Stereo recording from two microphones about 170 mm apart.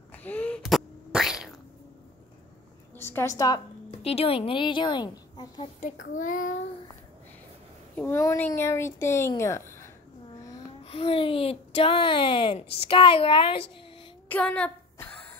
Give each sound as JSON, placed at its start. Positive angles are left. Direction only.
{"t": 0.1, "sound": "a sound", "side_deg": 10}
{"t": 3.0, "sound": "speech", "side_deg": 15}
{"t": 4.0, "sound": "a child's voice", "side_deg": 35}
{"t": 5.8, "sound": "a child's voice", "side_deg": 55}
{"t": 7.9, "sound": "speech", "side_deg": 10}
{"t": 10.8, "sound": "speech", "side_deg": 35}
{"t": 14.3, "sound": "a sound", "side_deg": 5}